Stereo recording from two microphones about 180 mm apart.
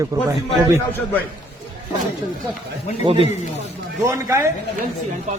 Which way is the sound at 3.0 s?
30° right (ahead or behind).